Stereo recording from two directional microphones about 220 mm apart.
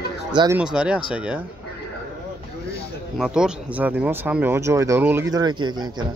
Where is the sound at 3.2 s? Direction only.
5° right (ahead or behind).